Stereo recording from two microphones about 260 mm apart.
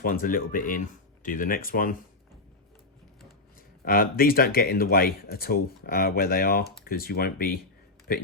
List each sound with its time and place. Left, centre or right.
0.0 s speech: left
3.8 s speech: left